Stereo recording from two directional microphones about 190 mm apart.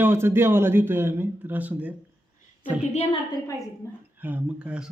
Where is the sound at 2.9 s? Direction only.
35° left (ahead or behind).